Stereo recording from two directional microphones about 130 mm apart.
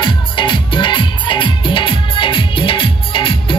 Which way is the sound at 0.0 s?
40° left (ahead or behind).